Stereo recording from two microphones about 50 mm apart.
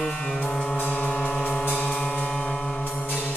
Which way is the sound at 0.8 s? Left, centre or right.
Left.